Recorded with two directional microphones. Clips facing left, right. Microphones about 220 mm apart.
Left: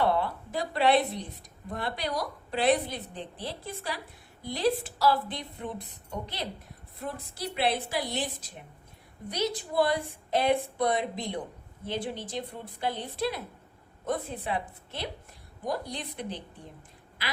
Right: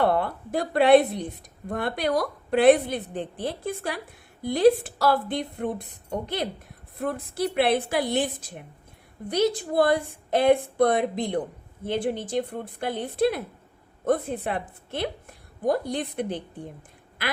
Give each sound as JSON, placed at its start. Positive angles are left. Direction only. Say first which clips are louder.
{"t": 0.0, "sound": "a woman's voice", "louder": "right 4 dB", "side_deg": -55}